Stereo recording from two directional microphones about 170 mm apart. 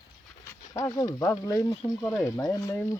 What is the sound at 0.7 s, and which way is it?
Speech, 20° left (ahead or behind).